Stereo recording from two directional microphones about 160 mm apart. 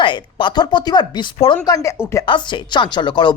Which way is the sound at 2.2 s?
30° left (ahead or behind).